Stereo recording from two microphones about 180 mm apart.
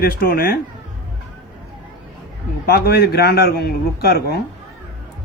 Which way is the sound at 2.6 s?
60° left (ahead or behind).